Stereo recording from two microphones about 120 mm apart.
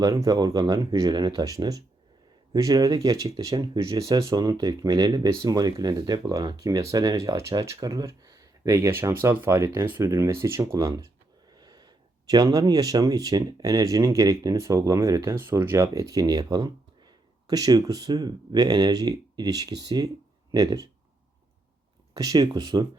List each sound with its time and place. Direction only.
0.0 s speech: 30° right (ahead or behind)
22.1 s speech: 30° right (ahead or behind)